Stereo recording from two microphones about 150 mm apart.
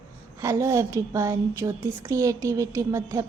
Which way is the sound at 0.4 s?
20° right (ahead or behind).